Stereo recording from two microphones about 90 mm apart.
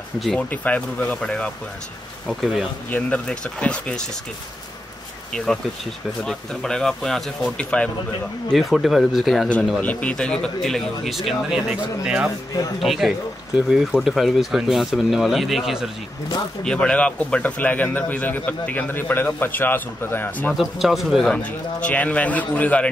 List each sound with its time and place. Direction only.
0.4 s speech: 15° left (ahead or behind)
2.2 s speech: centre (ahead or behind)
2.9 s speech: 10° left (ahead or behind)
6.2 s speech: 5° left (ahead or behind)
8.5 s speech: centre (ahead or behind)
9.8 s speech: 15° left (ahead or behind); by 15.9 s 5° right (ahead or behind)
16.6 s speech: 10° left (ahead or behind)
20.5 s speech: centre (ahead or behind)
21.3 s speech: 15° left (ahead or behind)